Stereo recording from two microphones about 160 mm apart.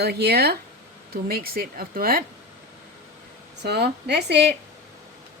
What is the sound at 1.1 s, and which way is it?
Speech, 70° right (ahead or behind).